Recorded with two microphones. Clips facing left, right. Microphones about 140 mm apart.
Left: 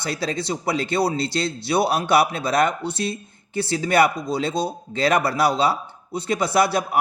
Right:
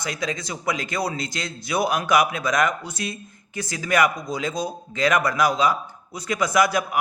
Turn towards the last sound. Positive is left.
turn(degrees=30)  # may be behind; listen again after turning